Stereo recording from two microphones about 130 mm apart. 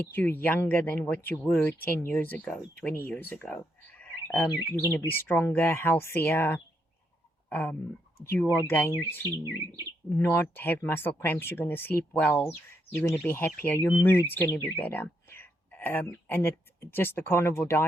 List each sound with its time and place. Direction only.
0.0 s speech: 15° left (ahead or behind)
10.2 s speech: 15° left (ahead or behind)